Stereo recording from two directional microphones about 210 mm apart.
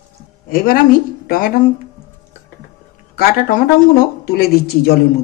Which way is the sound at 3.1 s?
45° left (ahead or behind).